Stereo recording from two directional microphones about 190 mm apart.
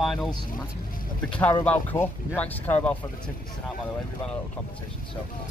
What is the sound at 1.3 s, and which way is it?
Speech, 10° left (ahead or behind).